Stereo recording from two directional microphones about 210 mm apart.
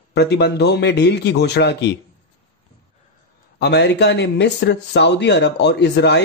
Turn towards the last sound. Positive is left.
turn(degrees=55)  # may be behind; listen again after turning